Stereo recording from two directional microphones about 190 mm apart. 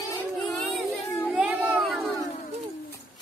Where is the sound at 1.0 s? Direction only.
15° left (ahead or behind).